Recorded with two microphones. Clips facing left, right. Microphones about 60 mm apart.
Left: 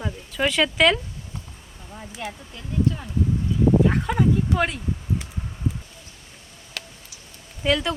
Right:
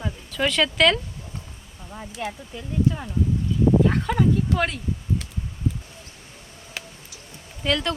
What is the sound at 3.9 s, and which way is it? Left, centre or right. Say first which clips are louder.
Speech: even; centre.